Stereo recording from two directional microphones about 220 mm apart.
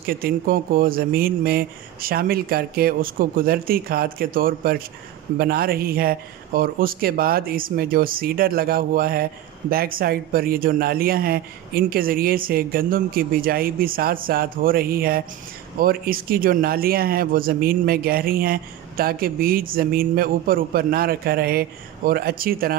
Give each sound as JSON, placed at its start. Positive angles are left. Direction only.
{"t": 0.0, "sound": "speech", "side_deg": -40}